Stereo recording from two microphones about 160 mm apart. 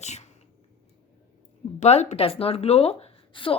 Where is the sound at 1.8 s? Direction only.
45° left (ahead or behind).